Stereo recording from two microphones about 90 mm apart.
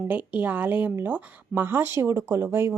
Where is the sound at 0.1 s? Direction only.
20° right (ahead or behind).